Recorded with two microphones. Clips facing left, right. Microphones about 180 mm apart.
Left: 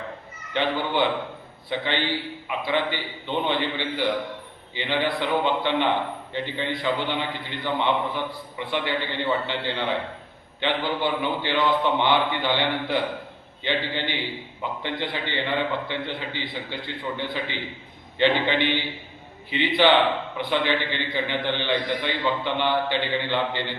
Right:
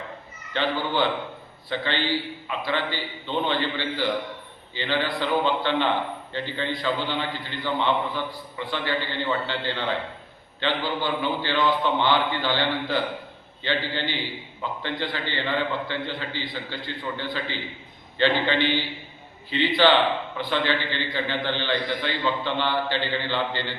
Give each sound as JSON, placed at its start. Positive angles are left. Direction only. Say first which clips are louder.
{"t": 0.5, "sound": "a man's voice", "louder": "left 1 dB", "side_deg": 20}